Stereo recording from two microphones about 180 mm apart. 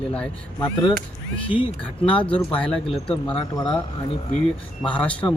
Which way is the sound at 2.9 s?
30° left (ahead or behind).